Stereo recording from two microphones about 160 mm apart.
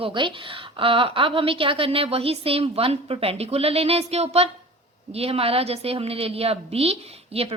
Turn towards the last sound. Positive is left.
turn(degrees=-40)  # may be behind; listen again after turning